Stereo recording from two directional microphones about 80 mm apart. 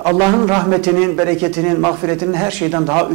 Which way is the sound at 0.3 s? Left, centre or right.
Centre.